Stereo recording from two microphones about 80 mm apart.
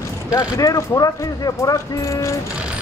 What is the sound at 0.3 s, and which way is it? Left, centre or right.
Speech, left.